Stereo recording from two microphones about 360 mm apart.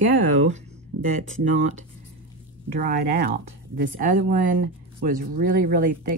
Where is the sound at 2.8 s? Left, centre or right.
Right.